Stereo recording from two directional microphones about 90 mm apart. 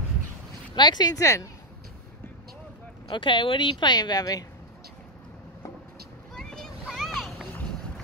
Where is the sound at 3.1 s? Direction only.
65° left (ahead or behind); by 4.4 s 45° left (ahead or behind).